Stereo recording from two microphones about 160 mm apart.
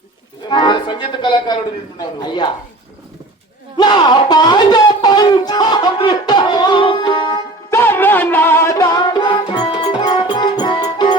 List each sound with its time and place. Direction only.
0.4 s music: 25° left (ahead or behind)
2.2 s a woman's voice: 30° left (ahead or behind)
3.8 s speech: 25° left (ahead or behind)
7.8 s music: 10° left (ahead or behind); by 11.2 s 25° left (ahead or behind)